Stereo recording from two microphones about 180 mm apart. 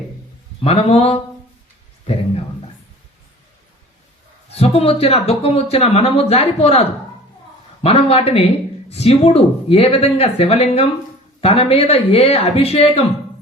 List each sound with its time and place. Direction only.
0.6 s speech: 35° left (ahead or behind)
4.5 s speech: 35° left (ahead or behind)